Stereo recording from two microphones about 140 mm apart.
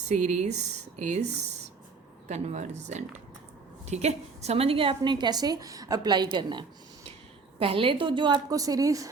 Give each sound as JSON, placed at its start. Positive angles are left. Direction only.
{"t": 0.1, "sound": "a woman's voice", "side_deg": -55}